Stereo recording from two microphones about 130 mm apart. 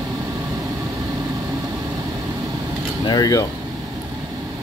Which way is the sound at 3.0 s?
30° left (ahead or behind).